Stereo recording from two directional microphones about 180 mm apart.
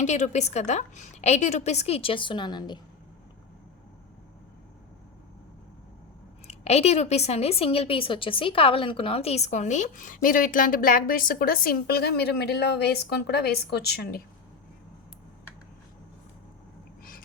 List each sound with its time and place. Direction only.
0.0 s a woman's voice: 40° left (ahead or behind); by 2.8 s 25° left (ahead or behind)
6.5 s a woman's voice: 35° left (ahead or behind); by 14.2 s 65° left (ahead or behind)